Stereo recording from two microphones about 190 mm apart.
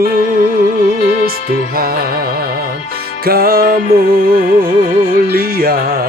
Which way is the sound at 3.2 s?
50° right (ahead or behind).